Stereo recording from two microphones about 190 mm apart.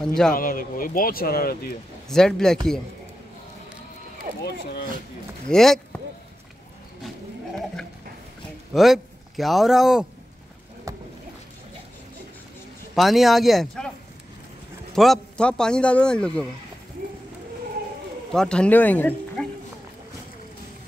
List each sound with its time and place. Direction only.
0.0 s a man's voice: 5° left (ahead or behind)
0.3 s speech: 45° left (ahead or behind)
2.0 s a man's voice: centre (ahead or behind)
5.5 s a man's voice: centre (ahead or behind)
8.7 s a man's voice: centre (ahead or behind)
10.9 s a sound: 15° right (ahead or behind)
12.9 s a man's voice: centre (ahead or behind)
15.0 s a man's voice: 5° left (ahead or behind)
18.3 s speech: 5° left (ahead or behind)